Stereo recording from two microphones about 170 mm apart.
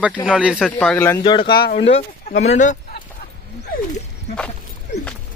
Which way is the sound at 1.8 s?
35° left (ahead or behind).